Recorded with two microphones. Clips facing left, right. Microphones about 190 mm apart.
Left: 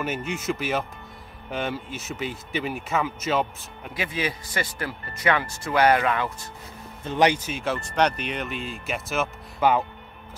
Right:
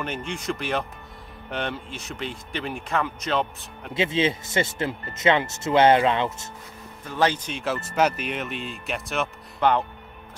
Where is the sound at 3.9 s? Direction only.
25° right (ahead or behind).